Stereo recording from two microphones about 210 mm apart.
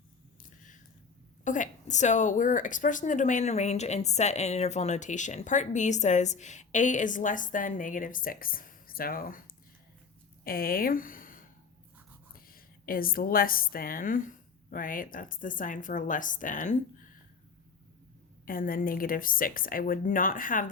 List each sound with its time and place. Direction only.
1.5 s a woman's voice: 35° left (ahead or behind)
10.4 s a woman's voice: 45° left (ahead or behind)
18.4 s a woman's voice: 40° left (ahead or behind)